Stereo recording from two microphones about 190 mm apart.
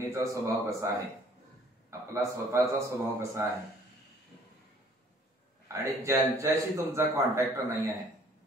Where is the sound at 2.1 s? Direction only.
15° right (ahead or behind).